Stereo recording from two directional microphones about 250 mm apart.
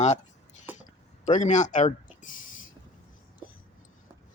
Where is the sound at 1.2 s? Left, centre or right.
Left.